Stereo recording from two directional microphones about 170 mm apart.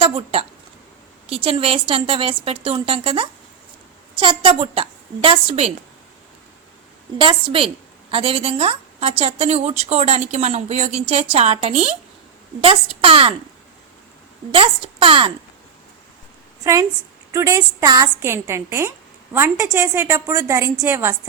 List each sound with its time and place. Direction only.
0.0 s a woman's voice: 35° right (ahead or behind)
7.2 s a woman's voice: 30° right (ahead or behind)
14.5 s a woman's voice: 35° right (ahead or behind)
17.3 s a woman's voice: 15° right (ahead or behind)